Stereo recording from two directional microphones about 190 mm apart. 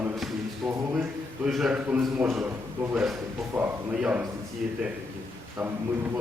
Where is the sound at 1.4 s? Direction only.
5° right (ahead or behind).